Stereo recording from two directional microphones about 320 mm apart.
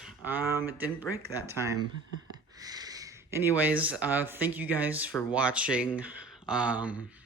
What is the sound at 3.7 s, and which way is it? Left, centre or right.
Speech, centre.